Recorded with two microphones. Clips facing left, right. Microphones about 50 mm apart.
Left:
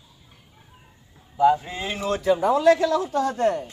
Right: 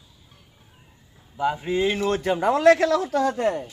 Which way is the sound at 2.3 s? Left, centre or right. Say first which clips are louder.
Right 2 dB; right.